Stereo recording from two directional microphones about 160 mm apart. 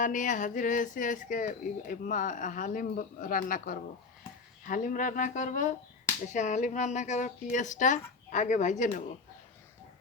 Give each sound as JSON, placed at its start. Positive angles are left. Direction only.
{"t": 0.0, "sound": "speech", "side_deg": 55}